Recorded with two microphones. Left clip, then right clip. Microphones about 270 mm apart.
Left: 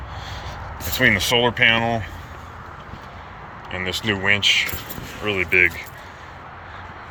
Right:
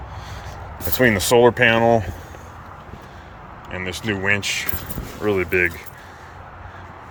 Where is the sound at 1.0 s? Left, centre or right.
Centre.